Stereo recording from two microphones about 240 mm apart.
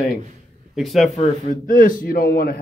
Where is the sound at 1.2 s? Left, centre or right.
Left.